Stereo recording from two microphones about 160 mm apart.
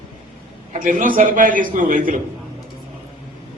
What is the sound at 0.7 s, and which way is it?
A man's voice, 55° right (ahead or behind).